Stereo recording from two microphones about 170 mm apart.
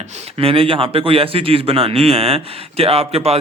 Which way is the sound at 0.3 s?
30° right (ahead or behind).